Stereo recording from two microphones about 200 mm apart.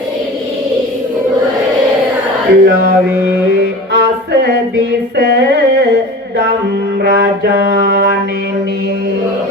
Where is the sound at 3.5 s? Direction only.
55° right (ahead or behind).